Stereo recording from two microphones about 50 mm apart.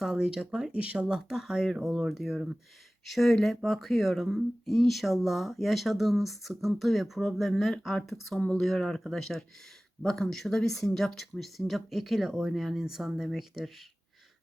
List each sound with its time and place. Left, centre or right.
0.0 s speech: centre
0.7 s speech: right
1.0 s speech: centre
3.1 s speech: centre